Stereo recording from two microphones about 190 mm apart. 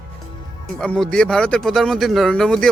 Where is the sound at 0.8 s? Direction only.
5° left (ahead or behind).